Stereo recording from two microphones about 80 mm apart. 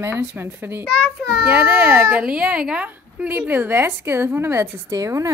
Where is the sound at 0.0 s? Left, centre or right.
Centre.